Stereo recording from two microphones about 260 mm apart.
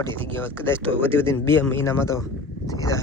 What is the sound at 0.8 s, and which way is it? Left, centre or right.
Speech, right.